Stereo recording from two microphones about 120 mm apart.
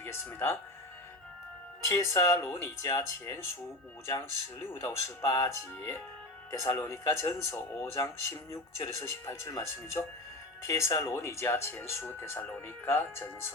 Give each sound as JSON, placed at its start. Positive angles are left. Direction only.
{"t": 0.0, "sound": "speech", "side_deg": 20}
{"t": 1.8, "sound": "speech", "side_deg": 25}